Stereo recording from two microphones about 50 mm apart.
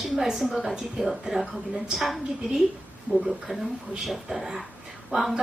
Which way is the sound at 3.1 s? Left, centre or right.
Right.